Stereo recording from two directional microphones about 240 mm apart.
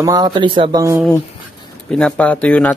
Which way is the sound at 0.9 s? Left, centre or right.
Centre.